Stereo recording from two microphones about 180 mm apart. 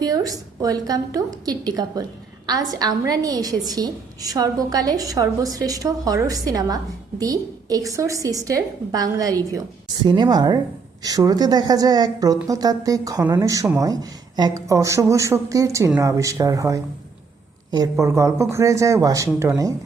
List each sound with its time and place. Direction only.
0.0 s a woman's voice: 20° right (ahead or behind)